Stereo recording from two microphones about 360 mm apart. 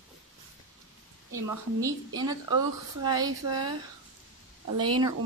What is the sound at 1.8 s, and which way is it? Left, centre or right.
Speech, centre.